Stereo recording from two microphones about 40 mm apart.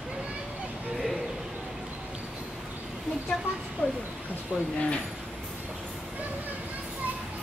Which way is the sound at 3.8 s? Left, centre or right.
Left.